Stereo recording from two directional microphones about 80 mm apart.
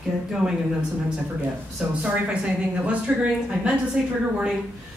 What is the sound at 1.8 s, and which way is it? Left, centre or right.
A woman's voice, centre.